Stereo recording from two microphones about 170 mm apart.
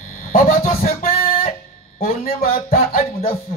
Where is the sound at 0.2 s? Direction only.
60° left (ahead or behind).